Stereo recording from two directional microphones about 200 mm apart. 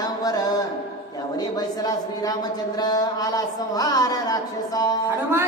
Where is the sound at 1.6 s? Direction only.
20° left (ahead or behind).